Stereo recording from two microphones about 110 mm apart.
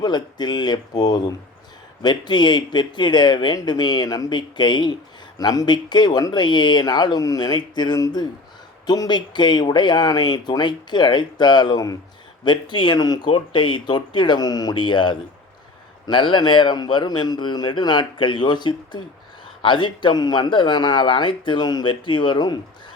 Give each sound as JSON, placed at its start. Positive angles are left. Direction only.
{"t": 0.0, "sound": "speech", "side_deg": 40}